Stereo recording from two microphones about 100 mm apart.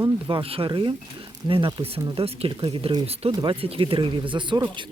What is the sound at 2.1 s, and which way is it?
Speech, 75° right (ahead or behind).